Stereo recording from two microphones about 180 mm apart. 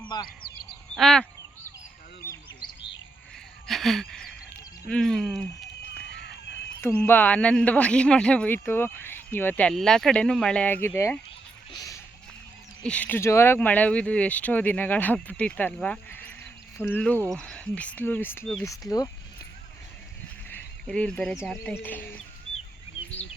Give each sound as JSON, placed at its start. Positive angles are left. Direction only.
{"t": 0.1, "sound": "speech", "side_deg": 20}
{"t": 0.9, "sound": "speech", "side_deg": 5}
{"t": 3.7, "sound": "a sound", "side_deg": 0}
{"t": 4.9, "sound": "speech", "side_deg": 5}
{"t": 6.0, "sound": "run", "side_deg": 70}
{"t": 6.8, "sound": "speech", "side_deg": 10}
{"t": 11.7, "sound": "a sound", "side_deg": 20}
{"t": 12.8, "sound": "speech", "side_deg": 5}
{"t": 18.6, "sound": "speech", "side_deg": 20}
{"t": 20.8, "sound": "speech", "side_deg": 5}